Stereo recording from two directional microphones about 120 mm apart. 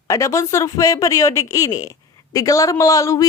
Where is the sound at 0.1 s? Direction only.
25° left (ahead or behind).